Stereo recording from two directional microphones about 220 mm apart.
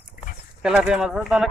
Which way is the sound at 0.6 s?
5° right (ahead or behind).